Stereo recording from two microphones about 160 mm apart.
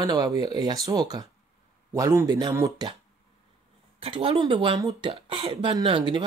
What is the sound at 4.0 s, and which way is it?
Speech, 35° right (ahead or behind).